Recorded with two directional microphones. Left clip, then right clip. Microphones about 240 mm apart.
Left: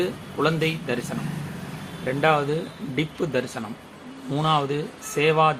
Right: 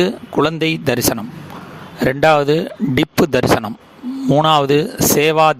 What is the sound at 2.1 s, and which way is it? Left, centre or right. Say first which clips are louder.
A man's voice: right 8 dB; right.